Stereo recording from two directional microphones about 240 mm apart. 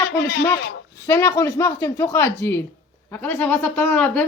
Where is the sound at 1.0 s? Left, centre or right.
Centre.